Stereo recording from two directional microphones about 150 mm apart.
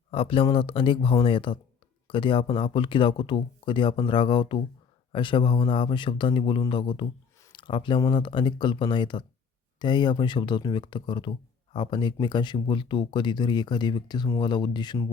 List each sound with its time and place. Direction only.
0.1 s speech: 40° left (ahead or behind)